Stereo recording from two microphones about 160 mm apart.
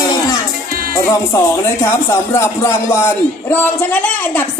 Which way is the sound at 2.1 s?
15° left (ahead or behind).